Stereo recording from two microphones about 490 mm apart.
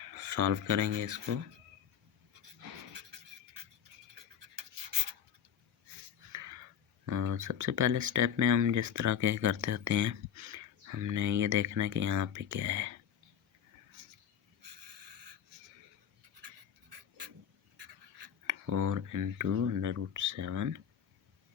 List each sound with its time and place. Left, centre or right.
0.2 s speech: right
3.0 s beatboxing: right
6.3 s a sound: right
7.0 s speech: right
18.4 s speech: right